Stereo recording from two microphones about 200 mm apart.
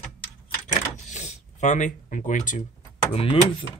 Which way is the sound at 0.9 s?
35° left (ahead or behind).